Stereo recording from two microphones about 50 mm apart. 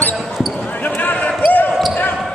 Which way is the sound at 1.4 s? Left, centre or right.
Left.